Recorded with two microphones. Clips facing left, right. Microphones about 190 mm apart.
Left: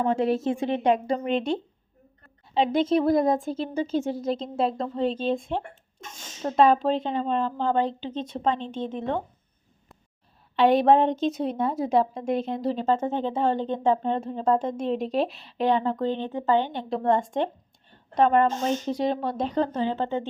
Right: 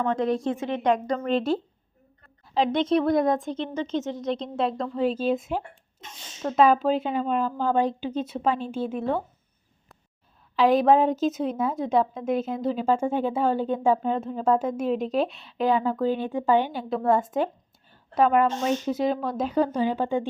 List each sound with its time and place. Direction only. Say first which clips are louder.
0.0 s a woman's voice: left 1 dB; 10° left (ahead or behind)
0.4 s a woman's voice: left 2 dB; 30° left (ahead or behind)
1.0 s a woman's voice: left 1 dB; 15° left (ahead or behind)
1.3 s a woman's voice: right 3 dB; centre (ahead or behind)
2.6 s a woman's voice: even; centre (ahead or behind)
10.5 s a woman's voice: even; centre (ahead or behind)